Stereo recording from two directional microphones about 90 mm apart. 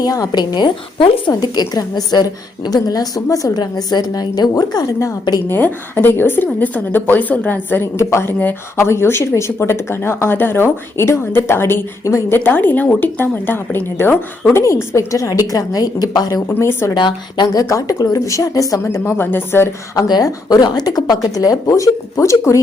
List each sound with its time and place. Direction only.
0.0 s a woman's voice: 45° left (ahead or behind); by 1.1 s 60° left (ahead or behind)
1.3 s a woman's voice: 45° left (ahead or behind)
5.5 s speech: 20° left (ahead or behind)
14.5 s speech: 30° left (ahead or behind)
16.5 s speech: 30° left (ahead or behind)
16.9 s a woman's voice: 55° left (ahead or behind); by 18.8 s 40° left (ahead or behind)
18.8 s speech: 30° left (ahead or behind)
20.0 s a woman's voice: 50° left (ahead or behind)